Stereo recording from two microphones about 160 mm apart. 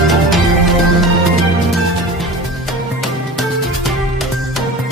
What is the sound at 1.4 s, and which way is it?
Music, centre (ahead or behind).